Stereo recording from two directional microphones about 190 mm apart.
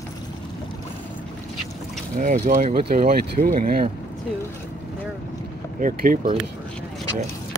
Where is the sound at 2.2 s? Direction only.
40° right (ahead or behind).